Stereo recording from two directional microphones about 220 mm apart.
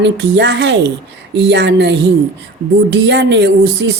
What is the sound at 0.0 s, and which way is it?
Speech, 50° right (ahead or behind).